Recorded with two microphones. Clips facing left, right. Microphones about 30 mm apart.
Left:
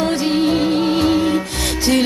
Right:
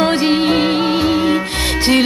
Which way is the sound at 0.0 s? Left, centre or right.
Right.